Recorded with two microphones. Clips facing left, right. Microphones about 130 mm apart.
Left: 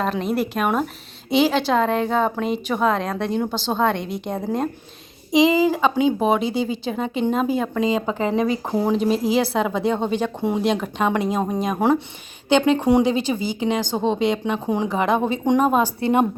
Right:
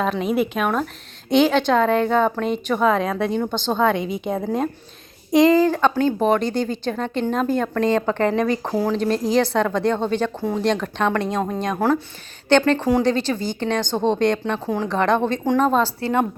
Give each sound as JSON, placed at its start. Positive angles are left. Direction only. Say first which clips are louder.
{"t": 0.0, "sound": "speech", "louder": "right 2 dB", "side_deg": 0}
{"t": 8.7, "sound": "speech", "louder": "left 3 dB", "side_deg": 20}
{"t": 9.0, "sound": "speech", "louder": "even", "side_deg": 5}
{"t": 11.8, "sound": "speech", "louder": "left 1 dB", "side_deg": 20}
{"t": 12.5, "sound": "speech", "louder": "even", "side_deg": 5}